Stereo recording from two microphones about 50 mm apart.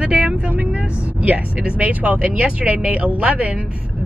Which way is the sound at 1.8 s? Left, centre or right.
Right.